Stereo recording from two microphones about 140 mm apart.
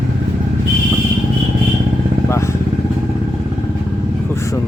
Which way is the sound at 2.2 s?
20° left (ahead or behind).